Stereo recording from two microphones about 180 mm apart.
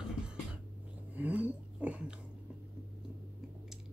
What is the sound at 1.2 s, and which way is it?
Dog, 10° right (ahead or behind).